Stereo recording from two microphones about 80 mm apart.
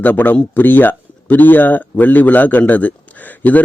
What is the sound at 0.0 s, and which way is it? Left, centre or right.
A man's voice, left.